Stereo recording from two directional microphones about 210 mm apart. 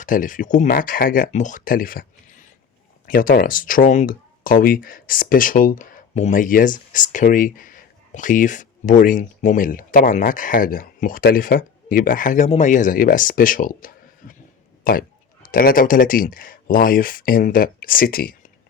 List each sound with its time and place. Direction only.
0.0 s speech: 40° left (ahead or behind)